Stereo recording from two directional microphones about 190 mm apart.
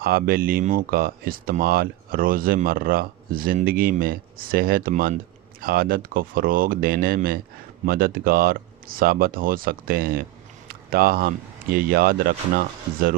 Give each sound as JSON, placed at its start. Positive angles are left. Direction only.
{"t": 0.0, "sound": "speech", "side_deg": -50}